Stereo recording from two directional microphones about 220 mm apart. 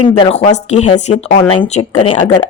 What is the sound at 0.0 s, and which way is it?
Speech, 20° left (ahead or behind).